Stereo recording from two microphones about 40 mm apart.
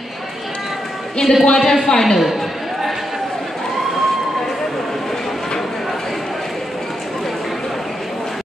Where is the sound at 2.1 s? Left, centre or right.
Centre.